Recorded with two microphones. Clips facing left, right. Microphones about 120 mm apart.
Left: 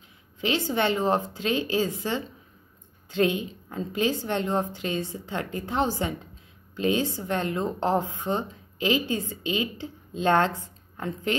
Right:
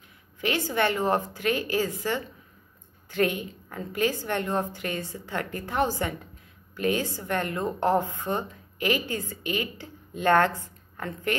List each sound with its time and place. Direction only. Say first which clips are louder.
0.4 s a woman's voice: left 1 dB; 20° left (ahead or behind)